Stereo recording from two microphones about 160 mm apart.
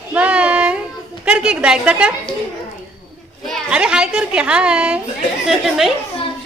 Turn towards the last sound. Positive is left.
turn(degrees=0)  # may be behind; listen again after turning